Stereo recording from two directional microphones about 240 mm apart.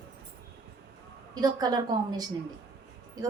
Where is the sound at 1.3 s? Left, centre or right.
Centre.